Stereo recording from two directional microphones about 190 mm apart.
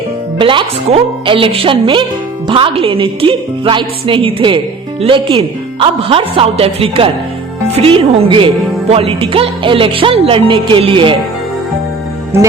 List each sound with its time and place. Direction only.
0.3 s a woman's voice: 25° right (ahead or behind)